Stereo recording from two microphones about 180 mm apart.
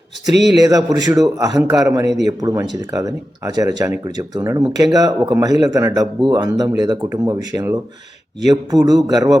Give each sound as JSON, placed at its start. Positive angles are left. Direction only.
{"t": 0.3, "sound": "a man's voice", "side_deg": 0}
{"t": 0.6, "sound": "speech", "side_deg": -20}